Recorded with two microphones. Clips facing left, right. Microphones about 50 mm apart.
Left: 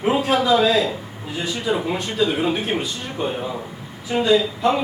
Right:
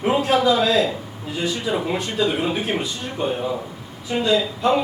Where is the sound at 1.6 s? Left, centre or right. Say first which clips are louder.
Left 1 dB; centre.